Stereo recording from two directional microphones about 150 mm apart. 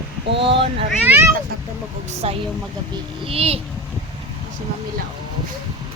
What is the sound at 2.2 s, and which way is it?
Speech, 40° right (ahead or behind).